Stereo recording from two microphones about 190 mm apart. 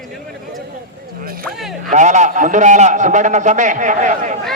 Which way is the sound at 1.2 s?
50° right (ahead or behind).